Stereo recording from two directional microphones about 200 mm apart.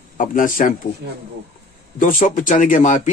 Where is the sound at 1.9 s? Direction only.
40° left (ahead or behind).